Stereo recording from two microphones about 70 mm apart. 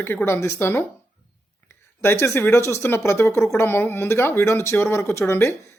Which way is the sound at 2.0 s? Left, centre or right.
Left.